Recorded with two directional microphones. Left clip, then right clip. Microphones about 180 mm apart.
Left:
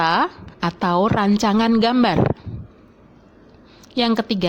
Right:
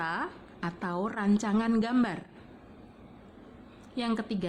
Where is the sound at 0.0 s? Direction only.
40° left (ahead or behind).